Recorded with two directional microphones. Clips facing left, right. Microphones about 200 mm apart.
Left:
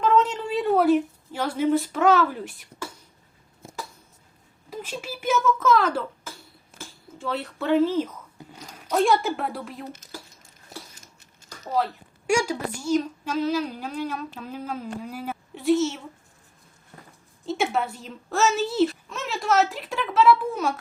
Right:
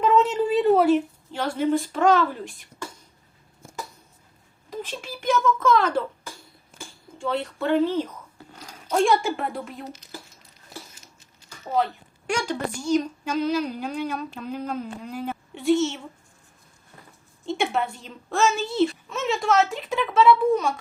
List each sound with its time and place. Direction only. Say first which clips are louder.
0.0 s a sound: right 2 dB; 5° right (ahead or behind)
4.7 s a child's voice: even; 10° left (ahead or behind)
8.4 s a sound: left 2 dB; 15° left (ahead or behind)
9.0 s a woman's voice: even; centre (ahead or behind)
9.8 s speech: even; 55° left (ahead or behind)
11.8 s a woman's voice: right 3 dB; centre (ahead or behind)
17.4 s a woman's voice: even; centre (ahead or behind)